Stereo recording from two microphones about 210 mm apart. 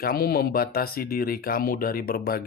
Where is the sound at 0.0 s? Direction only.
45° left (ahead or behind).